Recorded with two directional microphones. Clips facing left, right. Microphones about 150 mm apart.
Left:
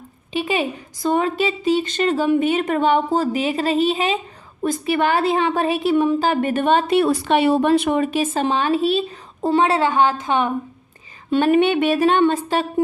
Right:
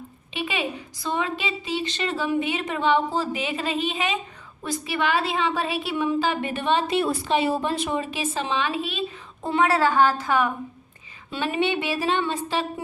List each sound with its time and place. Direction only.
0.3 s a woman's voice: 40° left (ahead or behind)
4.6 s a woman's voice: 50° left (ahead or behind); by 10.5 s 25° left (ahead or behind)
11.3 s a woman's voice: 50° left (ahead or behind)